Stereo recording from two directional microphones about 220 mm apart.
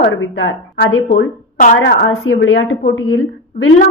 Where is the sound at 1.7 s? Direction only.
60° left (ahead or behind).